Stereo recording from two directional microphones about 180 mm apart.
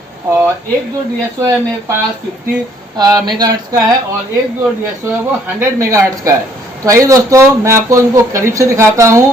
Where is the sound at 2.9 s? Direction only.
20° right (ahead or behind).